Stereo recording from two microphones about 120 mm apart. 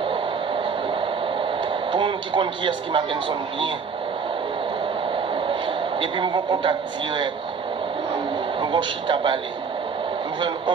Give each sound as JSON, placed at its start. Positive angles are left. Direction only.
{"t": 0.8, "sound": "radio", "side_deg": -45}
{"t": 5.3, "sound": "speech", "side_deg": -45}
{"t": 8.5, "sound": "speech", "side_deg": -45}